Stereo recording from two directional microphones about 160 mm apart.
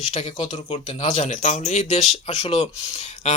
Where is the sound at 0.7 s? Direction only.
45° left (ahead or behind).